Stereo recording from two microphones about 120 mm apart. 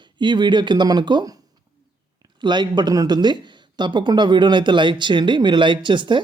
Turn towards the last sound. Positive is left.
turn(degrees=-40)  # may be behind; listen again after turning